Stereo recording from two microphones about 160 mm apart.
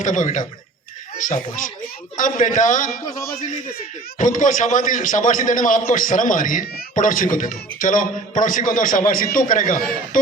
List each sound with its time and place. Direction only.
0.0 s a man's voice: 50° left (ahead or behind)